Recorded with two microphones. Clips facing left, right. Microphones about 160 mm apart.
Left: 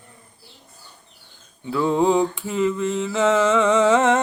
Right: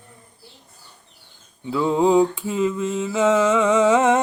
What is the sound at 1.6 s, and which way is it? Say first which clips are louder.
Mantra: right 1 dB; 15° right (ahead or behind).